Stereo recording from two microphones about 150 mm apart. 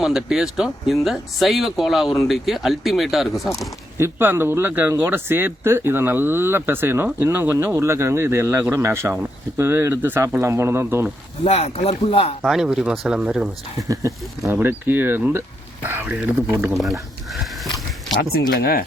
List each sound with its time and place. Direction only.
0.0 s speech: 5° right (ahead or behind)
3.9 s speech: 15° right (ahead or behind)
11.4 s speech: 40° left (ahead or behind)
12.4 s speech: 5° right (ahead or behind)
13.8 s speech: 25° right (ahead or behind)
16.7 s speech: centre (ahead or behind)
18.2 s speech: 90° left